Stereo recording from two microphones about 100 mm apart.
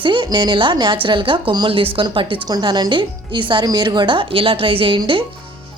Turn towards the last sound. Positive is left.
turn(degrees=-60)  # may be behind; listen again after turning